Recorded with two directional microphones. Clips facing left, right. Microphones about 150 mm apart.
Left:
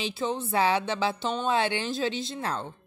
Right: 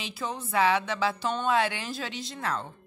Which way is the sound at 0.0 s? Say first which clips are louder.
Left 5 dB; 25° left (ahead or behind).